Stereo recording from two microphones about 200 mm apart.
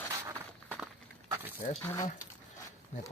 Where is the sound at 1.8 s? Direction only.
10° left (ahead or behind).